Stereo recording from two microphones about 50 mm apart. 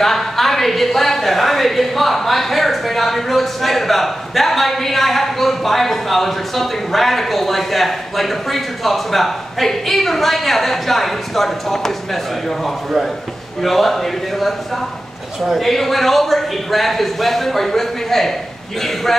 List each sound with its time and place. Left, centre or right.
0.0 s speech: centre